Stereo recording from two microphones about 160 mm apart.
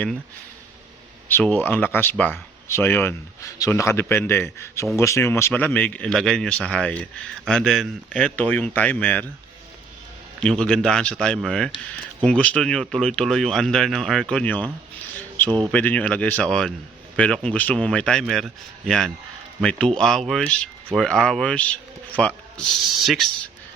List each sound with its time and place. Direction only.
1.3 s speech: 10° left (ahead or behind)
10.4 s speech: 5° left (ahead or behind)
15.4 s speech: 30° right (ahead or behind)
15.7 s speech: 10° left (ahead or behind)